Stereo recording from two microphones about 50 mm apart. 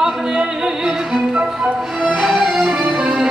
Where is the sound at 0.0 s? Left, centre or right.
Centre.